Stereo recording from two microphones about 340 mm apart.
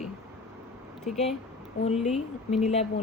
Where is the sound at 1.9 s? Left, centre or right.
Centre.